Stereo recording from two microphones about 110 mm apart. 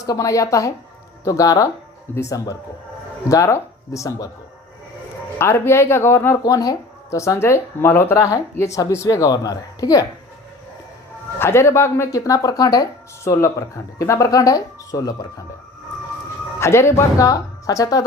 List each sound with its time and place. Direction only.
0.0 s speech: 30° left (ahead or behind)
5.4 s speech: 25° left (ahead or behind)
6.4 s speech: 35° left (ahead or behind)
11.3 s speech: 25° left (ahead or behind)
16.6 s speech: 25° left (ahead or behind)